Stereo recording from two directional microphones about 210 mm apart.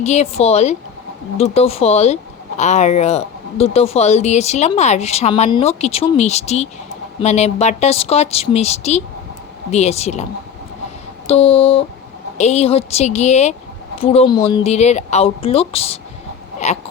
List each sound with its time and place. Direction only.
0.0 s speech: 30° left (ahead or behind)
11.3 s speech: 30° left (ahead or behind)